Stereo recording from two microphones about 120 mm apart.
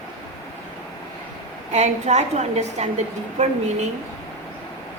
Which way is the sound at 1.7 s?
70° right (ahead or behind).